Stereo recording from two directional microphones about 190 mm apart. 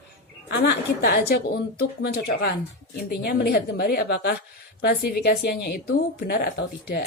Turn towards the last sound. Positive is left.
turn(degrees=55)  # may be behind; listen again after turning